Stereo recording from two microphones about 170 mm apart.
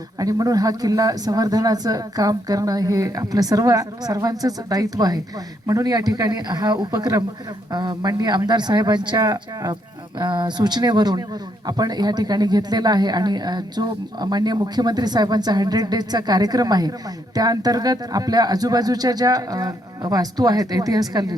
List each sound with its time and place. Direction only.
0.2 s speech: 20° right (ahead or behind)